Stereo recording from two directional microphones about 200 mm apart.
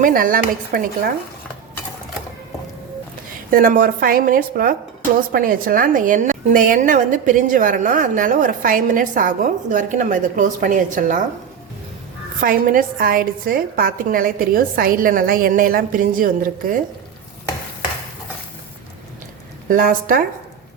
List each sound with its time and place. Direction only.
0.0 s a woman's voice: 45° right (ahead or behind)
3.5 s a woman's voice: 45° right (ahead or behind)
12.4 s a woman's voice: 45° right (ahead or behind)
19.6 s a woman's voice: 40° right (ahead or behind)